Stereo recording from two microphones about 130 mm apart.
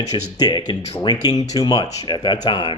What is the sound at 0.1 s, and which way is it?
Speech, 30° left (ahead or behind).